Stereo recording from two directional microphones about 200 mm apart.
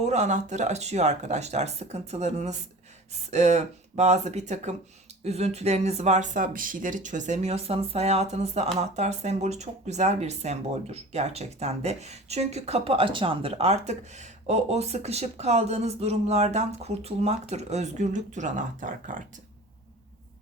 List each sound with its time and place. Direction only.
0.0 s speech: 35° right (ahead or behind)